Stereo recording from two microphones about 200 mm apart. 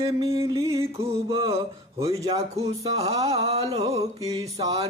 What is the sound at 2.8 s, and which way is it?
Music, 30° right (ahead or behind).